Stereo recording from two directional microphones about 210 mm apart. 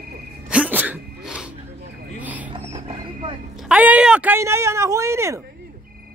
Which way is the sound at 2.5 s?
30° right (ahead or behind).